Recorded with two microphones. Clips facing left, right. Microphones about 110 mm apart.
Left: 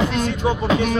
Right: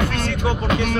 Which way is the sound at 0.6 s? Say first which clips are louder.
Left 3 dB; 30° left (ahead or behind).